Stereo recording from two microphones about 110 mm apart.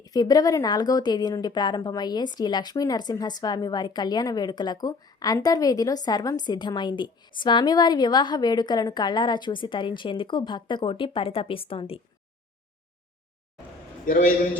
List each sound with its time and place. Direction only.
0.0 s a woman's voice: 35° left (ahead or behind); by 11.9 s 55° left (ahead or behind)